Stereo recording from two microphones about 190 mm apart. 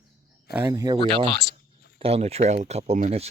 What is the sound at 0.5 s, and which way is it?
Speech, 15° right (ahead or behind).